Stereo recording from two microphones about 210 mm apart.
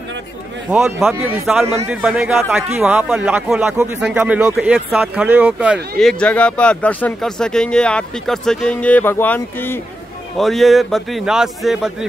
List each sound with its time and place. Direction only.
0.7 s a man's voice: 10° right (ahead or behind)